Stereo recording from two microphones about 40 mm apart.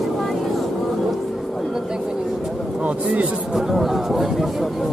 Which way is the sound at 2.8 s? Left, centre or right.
Right.